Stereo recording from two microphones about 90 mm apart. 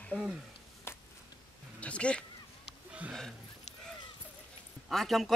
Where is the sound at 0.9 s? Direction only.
30° left (ahead or behind).